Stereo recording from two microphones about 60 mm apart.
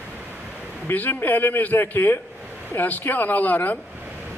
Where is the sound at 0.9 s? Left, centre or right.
Left.